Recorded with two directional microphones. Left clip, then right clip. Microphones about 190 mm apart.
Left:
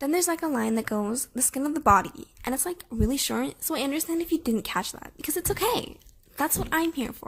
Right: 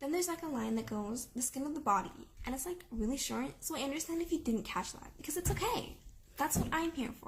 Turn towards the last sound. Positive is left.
turn(degrees=45)  # may be behind; listen again after turning